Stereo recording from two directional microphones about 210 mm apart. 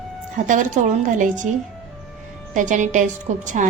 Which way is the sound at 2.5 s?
35° right (ahead or behind).